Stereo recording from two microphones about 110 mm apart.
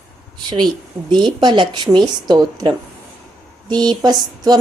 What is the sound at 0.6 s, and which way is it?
A woman's voice, 45° right (ahead or behind).